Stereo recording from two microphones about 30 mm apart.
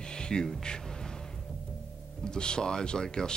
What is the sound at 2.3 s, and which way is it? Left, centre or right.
Speech, left.